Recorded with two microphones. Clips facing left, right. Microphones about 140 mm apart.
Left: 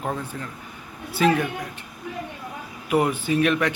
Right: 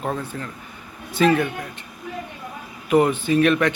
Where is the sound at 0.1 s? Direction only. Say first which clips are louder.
Right 2 dB; 15° left (ahead or behind).